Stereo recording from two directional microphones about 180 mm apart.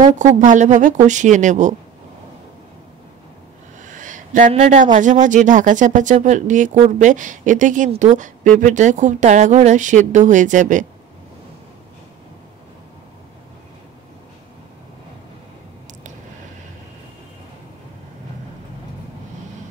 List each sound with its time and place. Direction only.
0.1 s speech: 45° right (ahead or behind)
3.8 s a sound: 45° right (ahead or behind)
4.5 s speech: 40° right (ahead or behind)